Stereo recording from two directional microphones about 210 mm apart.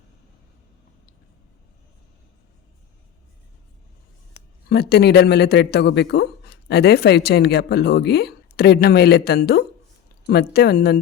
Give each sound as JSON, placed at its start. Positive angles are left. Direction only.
{"t": 4.7, "sound": "speech", "side_deg": 50}